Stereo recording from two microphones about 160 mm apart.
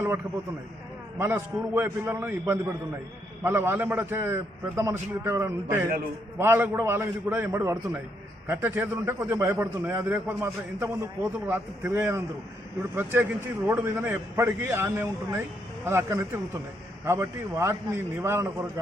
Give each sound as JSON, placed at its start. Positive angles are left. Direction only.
{"t": 1.2, "sound": "a man's voice", "side_deg": -15}